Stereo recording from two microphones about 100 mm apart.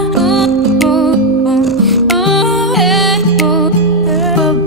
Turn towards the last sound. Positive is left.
turn(degrees=0)  # may be behind; listen again after turning